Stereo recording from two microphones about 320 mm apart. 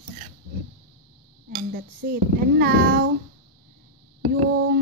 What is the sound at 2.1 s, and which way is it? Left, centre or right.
Speech, right.